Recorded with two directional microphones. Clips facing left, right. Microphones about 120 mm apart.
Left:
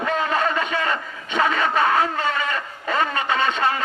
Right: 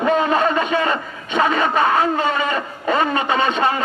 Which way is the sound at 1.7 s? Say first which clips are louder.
Right 2 dB; 20° right (ahead or behind).